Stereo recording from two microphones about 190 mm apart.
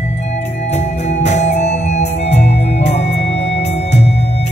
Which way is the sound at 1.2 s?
35° left (ahead or behind).